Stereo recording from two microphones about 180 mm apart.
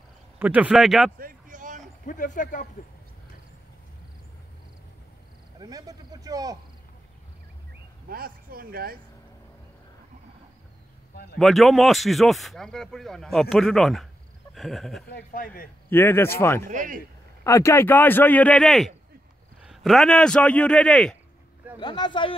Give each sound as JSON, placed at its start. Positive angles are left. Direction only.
{"t": 0.4, "sound": "speech", "side_deg": -10}
{"t": 1.1, "sound": "a sound", "side_deg": -50}
{"t": 2.0, "sound": "speech", "side_deg": 45}
{"t": 5.6, "sound": "speech", "side_deg": -20}
{"t": 8.1, "sound": "speech", "side_deg": -55}
{"t": 11.3, "sound": "speech", "side_deg": 0}
{"t": 15.0, "sound": "speech", "side_deg": 60}
{"t": 15.9, "sound": "speech", "side_deg": 10}
{"t": 16.6, "sound": "speech", "side_deg": -45}
{"t": 17.4, "sound": "speech", "side_deg": 15}
{"t": 21.7, "sound": "speech", "side_deg": 25}